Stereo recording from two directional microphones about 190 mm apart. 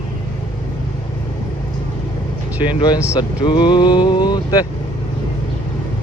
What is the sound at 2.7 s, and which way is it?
Speech, 25° left (ahead or behind).